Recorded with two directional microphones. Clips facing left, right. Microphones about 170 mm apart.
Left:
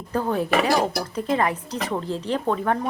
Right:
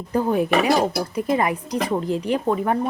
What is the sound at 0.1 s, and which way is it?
A woman's voice, 15° right (ahead or behind).